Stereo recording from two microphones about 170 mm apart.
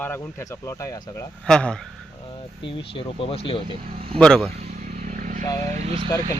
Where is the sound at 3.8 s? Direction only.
40° right (ahead or behind).